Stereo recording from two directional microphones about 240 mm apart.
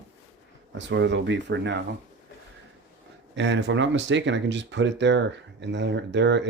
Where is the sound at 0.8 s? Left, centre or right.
Right.